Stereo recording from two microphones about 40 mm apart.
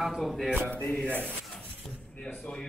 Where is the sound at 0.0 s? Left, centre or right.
Centre.